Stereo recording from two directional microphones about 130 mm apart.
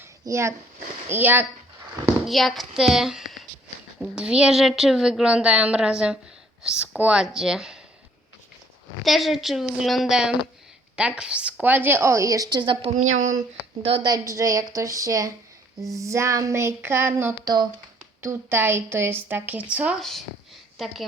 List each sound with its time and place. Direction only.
0.0 s a sound: 20° right (ahead or behind)
1.0 s a woman's voice: 15° right (ahead or behind)
2.2 s a child's voice: centre (ahead or behind)
9.0 s a woman's voice: centre (ahead or behind); by 12.9 s 40° right (ahead or behind)
13.0 s speech: 70° right (ahead or behind)
13.8 s a woman's voice: 45° right (ahead or behind)
14.1 s a sound: 25° right (ahead or behind)
17.4 s speech: 30° right (ahead or behind)
18.2 s a woman's voice: 20° right (ahead or behind)
20.0 s a woman's voice: 5° left (ahead or behind)